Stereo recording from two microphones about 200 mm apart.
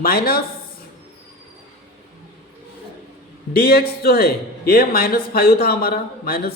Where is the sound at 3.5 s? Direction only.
50° left (ahead or behind).